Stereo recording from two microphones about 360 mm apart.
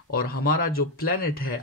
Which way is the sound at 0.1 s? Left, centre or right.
Left.